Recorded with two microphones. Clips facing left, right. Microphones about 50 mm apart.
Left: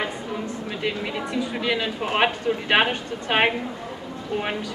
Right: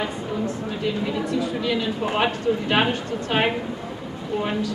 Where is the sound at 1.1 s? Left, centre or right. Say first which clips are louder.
Right 2 dB; left.